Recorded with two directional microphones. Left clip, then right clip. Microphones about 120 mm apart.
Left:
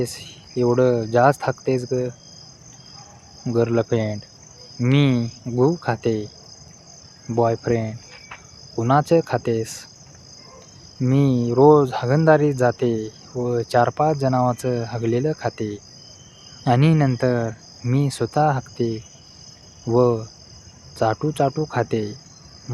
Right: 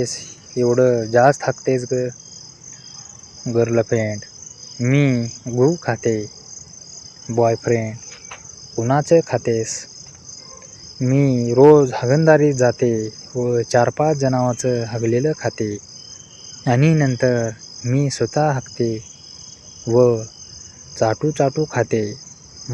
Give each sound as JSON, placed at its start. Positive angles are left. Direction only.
{"t": 0.0, "sound": "speech", "side_deg": -10}
{"t": 3.4, "sound": "speech", "side_deg": -10}
{"t": 7.3, "sound": "speech", "side_deg": -15}
{"t": 8.7, "sound": "speech", "side_deg": -5}
{"t": 11.0, "sound": "speech", "side_deg": -10}
{"t": 19.8, "sound": "cricket", "side_deg": -15}